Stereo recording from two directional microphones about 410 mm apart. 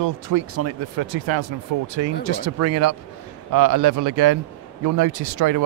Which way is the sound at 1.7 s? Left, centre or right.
Right.